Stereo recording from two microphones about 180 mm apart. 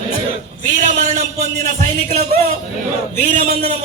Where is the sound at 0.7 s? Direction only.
40° right (ahead or behind).